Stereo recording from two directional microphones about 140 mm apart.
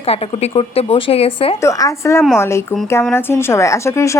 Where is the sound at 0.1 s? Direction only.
45° left (ahead or behind).